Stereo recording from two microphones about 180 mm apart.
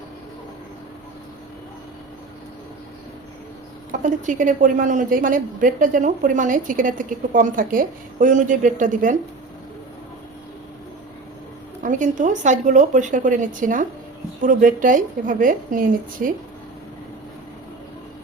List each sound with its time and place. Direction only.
4.0 s a woman's voice: 45° right (ahead or behind)
11.8 s a woman's voice: 45° right (ahead or behind)